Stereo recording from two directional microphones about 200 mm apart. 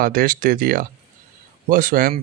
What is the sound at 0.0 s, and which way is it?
Speech, 45° right (ahead or behind).